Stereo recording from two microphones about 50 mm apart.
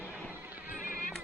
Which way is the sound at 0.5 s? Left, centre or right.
Right.